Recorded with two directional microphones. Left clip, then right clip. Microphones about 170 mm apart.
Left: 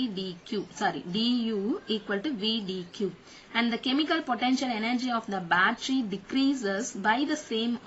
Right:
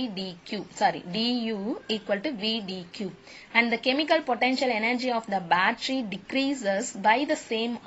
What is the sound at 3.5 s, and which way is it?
A woman's voice, 20° right (ahead or behind).